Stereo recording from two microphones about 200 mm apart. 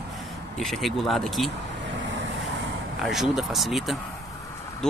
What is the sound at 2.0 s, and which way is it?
Vehicle, 65° right (ahead or behind).